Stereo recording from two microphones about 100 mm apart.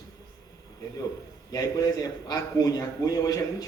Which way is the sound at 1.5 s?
40° left (ahead or behind).